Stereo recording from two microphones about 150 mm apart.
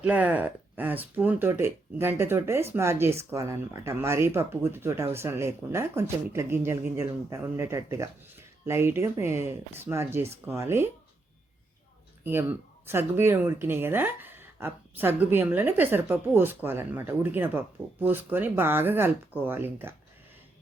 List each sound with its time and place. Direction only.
0.0 s speech: 10° right (ahead or behind)
12.2 s speech: 15° right (ahead or behind)